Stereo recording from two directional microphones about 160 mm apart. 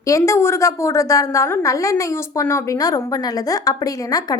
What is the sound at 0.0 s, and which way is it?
A woman's voice, 20° left (ahead or behind).